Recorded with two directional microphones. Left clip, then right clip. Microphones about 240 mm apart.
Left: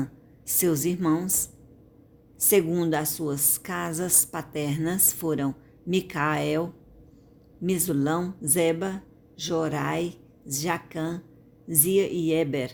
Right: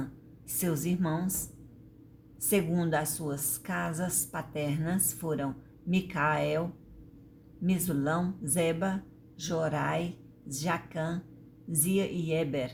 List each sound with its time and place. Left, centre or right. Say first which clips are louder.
0.4 s a woman's voice: left 8 dB; left
2.4 s a woman's voice: left 7 dB; left